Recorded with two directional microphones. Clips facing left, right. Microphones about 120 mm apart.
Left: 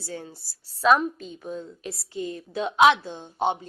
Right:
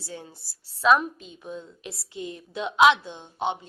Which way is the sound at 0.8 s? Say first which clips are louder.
Left 1 dB; 40° left (ahead or behind).